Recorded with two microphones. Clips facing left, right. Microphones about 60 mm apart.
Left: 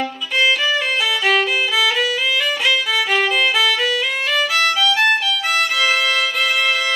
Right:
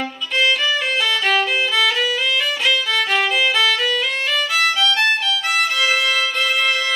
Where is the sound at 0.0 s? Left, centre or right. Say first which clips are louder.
Left 1 dB; centre.